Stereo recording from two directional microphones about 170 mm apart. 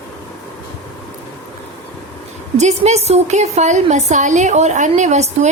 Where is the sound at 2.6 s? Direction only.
40° right (ahead or behind).